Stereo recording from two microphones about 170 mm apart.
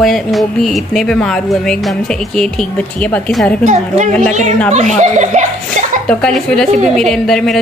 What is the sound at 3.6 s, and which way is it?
A woman's voice, 45° right (ahead or behind).